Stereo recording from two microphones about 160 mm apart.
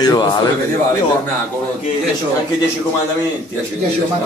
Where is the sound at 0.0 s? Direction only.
25° left (ahead or behind).